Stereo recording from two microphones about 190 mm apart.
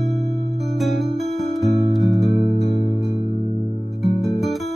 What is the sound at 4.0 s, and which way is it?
Music, centre (ahead or behind).